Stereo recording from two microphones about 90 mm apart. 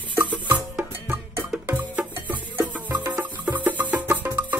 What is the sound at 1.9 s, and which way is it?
Music, 20° right (ahead or behind).